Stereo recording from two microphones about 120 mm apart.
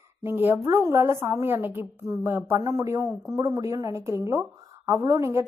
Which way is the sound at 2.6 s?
30° right (ahead or behind).